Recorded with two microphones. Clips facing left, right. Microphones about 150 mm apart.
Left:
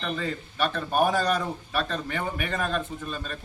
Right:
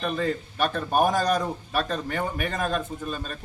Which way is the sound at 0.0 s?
40° right (ahead or behind).